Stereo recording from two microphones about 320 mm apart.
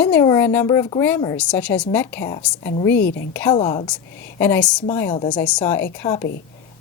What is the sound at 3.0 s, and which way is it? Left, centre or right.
Speech, left.